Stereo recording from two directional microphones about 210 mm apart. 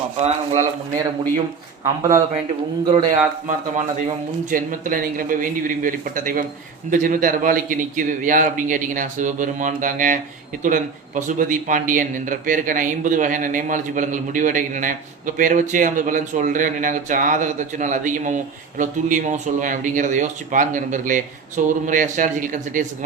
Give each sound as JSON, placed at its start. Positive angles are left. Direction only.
{"t": 0.2, "sound": "a man's voice", "side_deg": -30}
{"t": 1.8, "sound": "speech", "side_deg": -15}
{"t": 3.1, "sound": "a man's voice", "side_deg": -35}